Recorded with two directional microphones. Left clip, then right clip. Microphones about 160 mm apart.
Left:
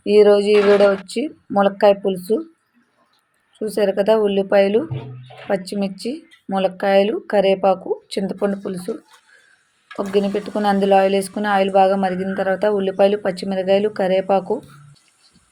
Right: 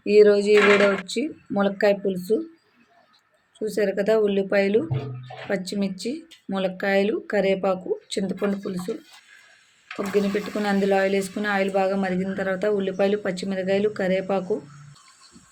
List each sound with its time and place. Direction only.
0.0 s speech: 15° left (ahead or behind)
3.8 s speech: 15° left (ahead or behind)
6.5 s speech: 15° left (ahead or behind)
9.9 s speech: 20° left (ahead or behind)